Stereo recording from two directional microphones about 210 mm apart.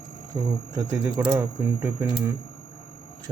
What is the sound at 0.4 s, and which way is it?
Speech, 15° right (ahead or behind).